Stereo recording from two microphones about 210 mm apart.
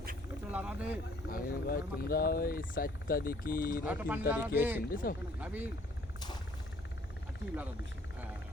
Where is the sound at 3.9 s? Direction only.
10° right (ahead or behind).